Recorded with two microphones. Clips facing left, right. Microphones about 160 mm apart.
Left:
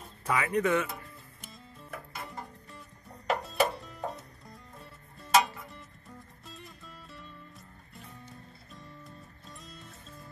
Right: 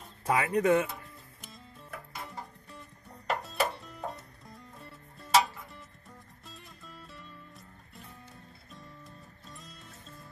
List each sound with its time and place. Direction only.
0.3 s speech: 35° right (ahead or behind)
0.8 s music: centre (ahead or behind)